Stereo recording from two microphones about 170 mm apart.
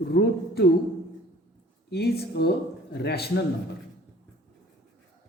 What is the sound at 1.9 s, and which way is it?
A man's voice, 70° left (ahead or behind).